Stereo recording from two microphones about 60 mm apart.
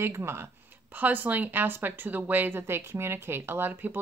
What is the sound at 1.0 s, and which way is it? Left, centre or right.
Speech, right.